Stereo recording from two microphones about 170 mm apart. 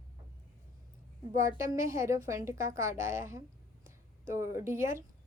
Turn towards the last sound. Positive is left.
turn(degrees=-15)  # may be behind; listen again after turning